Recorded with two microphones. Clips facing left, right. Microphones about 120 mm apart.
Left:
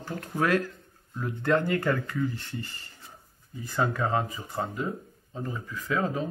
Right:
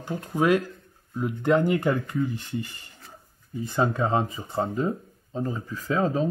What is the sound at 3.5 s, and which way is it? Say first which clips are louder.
Speech: right 4 dB; 25° right (ahead or behind).